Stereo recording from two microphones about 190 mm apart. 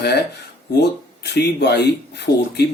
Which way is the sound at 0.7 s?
60° left (ahead or behind).